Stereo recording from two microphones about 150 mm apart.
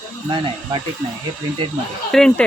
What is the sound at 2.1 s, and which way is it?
Speech, 5° left (ahead or behind).